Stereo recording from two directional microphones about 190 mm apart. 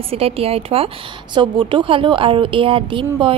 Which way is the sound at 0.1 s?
30° right (ahead or behind).